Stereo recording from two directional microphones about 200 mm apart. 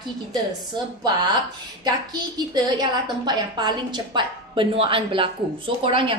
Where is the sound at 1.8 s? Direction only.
20° right (ahead or behind).